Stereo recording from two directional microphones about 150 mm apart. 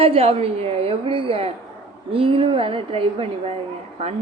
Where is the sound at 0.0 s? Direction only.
40° right (ahead or behind).